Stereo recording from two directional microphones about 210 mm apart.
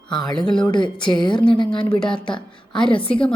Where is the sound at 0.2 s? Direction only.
Centre (ahead or behind).